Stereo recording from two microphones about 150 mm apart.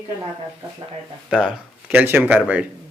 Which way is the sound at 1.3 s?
5° right (ahead or behind).